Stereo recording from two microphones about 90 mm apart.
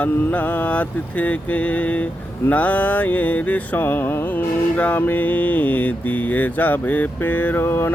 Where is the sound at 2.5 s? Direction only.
15° left (ahead or behind).